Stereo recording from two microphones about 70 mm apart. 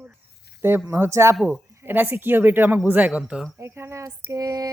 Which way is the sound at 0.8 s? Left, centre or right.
Right.